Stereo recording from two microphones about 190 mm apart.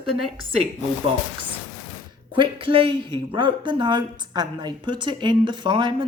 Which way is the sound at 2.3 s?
25° right (ahead or behind).